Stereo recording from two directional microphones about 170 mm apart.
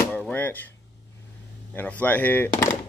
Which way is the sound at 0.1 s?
10° left (ahead or behind).